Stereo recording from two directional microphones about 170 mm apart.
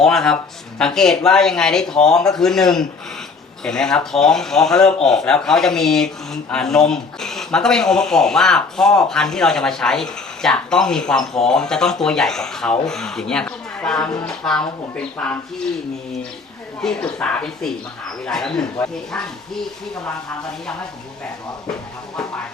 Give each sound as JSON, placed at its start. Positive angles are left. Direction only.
{"t": 0.0, "sound": "speech", "side_deg": 5}
{"t": 16.8, "sound": "speech", "side_deg": 5}